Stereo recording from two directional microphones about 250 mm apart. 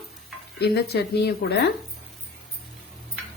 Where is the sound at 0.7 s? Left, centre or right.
Left.